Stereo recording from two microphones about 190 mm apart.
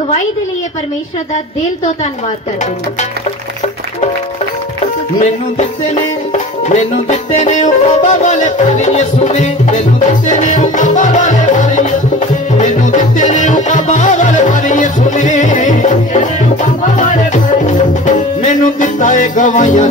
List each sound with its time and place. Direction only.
6.3 s music: 40° left (ahead or behind)